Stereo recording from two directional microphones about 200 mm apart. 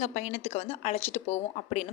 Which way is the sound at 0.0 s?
35° left (ahead or behind).